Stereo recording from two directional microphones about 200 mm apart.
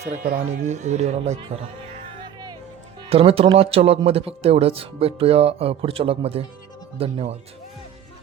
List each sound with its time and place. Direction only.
0.0 s speech: 50° right (ahead or behind); by 1.5 s 35° right (ahead or behind)
3.1 s speech: 30° right (ahead or behind)